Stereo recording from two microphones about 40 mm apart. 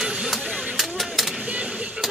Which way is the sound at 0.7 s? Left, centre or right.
Centre.